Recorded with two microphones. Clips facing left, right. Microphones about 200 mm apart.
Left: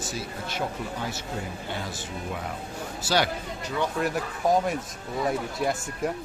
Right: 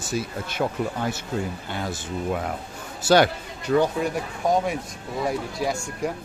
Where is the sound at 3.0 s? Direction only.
55° right (ahead or behind).